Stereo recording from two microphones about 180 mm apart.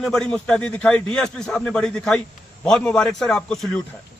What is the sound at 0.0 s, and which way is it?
A man's voice, 5° left (ahead or behind).